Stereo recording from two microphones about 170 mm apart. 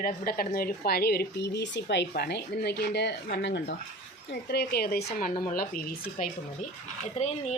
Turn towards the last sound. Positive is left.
turn(degrees=40)  # may be behind; listen again after turning